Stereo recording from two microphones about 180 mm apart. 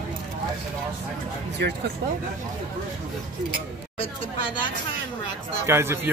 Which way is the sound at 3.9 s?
30° left (ahead or behind).